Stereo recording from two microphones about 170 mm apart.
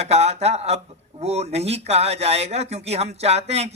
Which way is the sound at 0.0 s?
40° right (ahead or behind).